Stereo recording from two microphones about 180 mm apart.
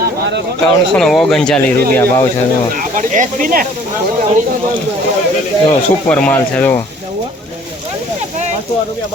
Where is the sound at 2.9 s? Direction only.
45° right (ahead or behind).